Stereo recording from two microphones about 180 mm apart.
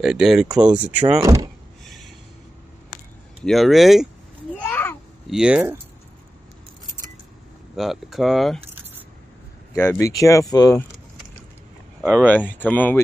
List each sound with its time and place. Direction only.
0.0 s speech: centre (ahead or behind)
1.2 s speech: 20° right (ahead or behind)
1.9 s a sound: centre (ahead or behind)
3.4 s speech: centre (ahead or behind)
4.6 s a sound: 10° left (ahead or behind)
5.3 s speech: 5° right (ahead or behind)
7.7 s speech: centre (ahead or behind)
9.8 s speech: 15° left (ahead or behind)
12.3 s speech: 10° left (ahead or behind)